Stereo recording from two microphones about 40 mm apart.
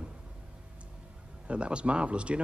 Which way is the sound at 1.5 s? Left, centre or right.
Right.